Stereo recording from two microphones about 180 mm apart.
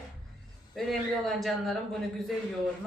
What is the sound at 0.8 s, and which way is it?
Speech, centre (ahead or behind).